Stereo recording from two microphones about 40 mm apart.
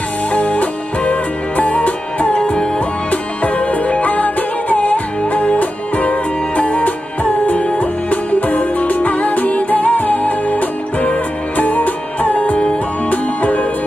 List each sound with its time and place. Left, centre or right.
0.3 s music: left